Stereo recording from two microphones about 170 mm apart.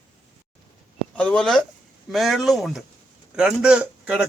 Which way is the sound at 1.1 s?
5° left (ahead or behind).